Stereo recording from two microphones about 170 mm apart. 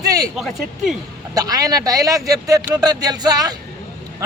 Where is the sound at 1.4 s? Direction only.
20° right (ahead or behind).